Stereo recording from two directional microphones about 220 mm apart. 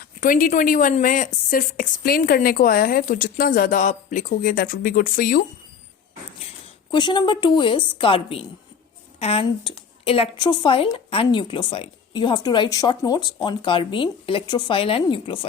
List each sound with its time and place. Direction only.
0.2 s a woman's voice: 40° left (ahead or behind)
6.9 s a woman's voice: 20° left (ahead or behind)